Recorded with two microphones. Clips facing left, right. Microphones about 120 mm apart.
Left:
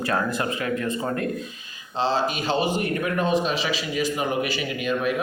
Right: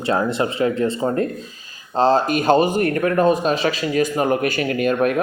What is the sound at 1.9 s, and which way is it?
Speech, 45° right (ahead or behind).